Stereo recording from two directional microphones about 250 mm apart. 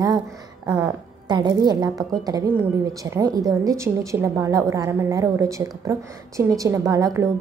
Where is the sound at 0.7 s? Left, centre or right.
Centre.